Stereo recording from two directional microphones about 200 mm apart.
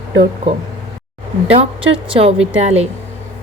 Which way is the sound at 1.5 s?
25° right (ahead or behind).